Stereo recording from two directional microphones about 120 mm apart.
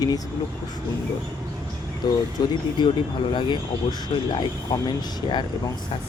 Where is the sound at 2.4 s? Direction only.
35° left (ahead or behind).